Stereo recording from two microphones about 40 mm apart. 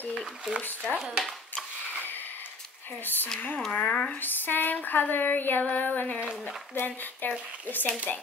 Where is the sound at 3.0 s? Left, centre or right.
Left.